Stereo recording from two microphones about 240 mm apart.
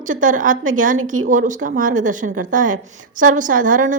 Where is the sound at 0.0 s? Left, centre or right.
Right.